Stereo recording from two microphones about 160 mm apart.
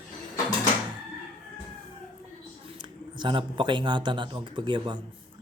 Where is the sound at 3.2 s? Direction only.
30° right (ahead or behind).